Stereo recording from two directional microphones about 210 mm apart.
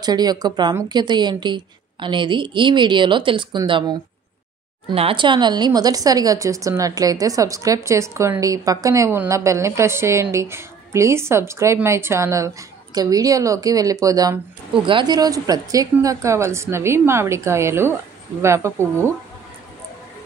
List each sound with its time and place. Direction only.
0.0 s a woman's voice: 20° right (ahead or behind)